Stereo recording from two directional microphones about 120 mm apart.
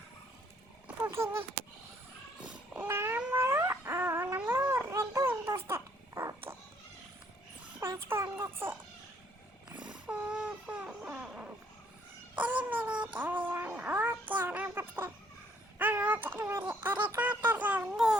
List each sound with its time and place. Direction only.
1.1 s speech: 20° right (ahead or behind)
2.4 s cat: 15° right (ahead or behind)
3.2 s a sound: 20° right (ahead or behind)
7.8 s a child's voice: 20° right (ahead or behind)
9.8 s baby cry: 10° right (ahead or behind)
12.4 s a sound: 15° right (ahead or behind)
15.8 s speech: 15° right (ahead or behind)